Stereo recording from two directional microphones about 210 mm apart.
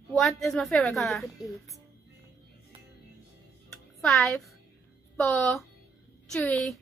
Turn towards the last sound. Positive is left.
turn(degrees=0)  # may be behind; listen again after turning